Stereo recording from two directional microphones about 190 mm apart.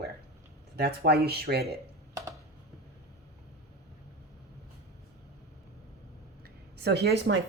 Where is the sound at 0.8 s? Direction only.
60° right (ahead or behind).